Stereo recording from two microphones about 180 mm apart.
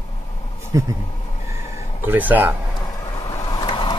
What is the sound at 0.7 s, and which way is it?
Speech, 15° right (ahead or behind).